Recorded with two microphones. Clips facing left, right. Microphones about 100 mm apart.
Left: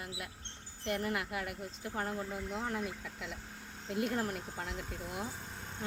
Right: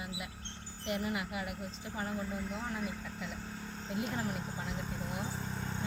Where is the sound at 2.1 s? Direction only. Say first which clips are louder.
Even; 5° left (ahead or behind).